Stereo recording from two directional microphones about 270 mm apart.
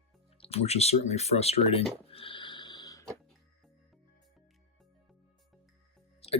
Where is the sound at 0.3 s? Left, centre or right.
Left.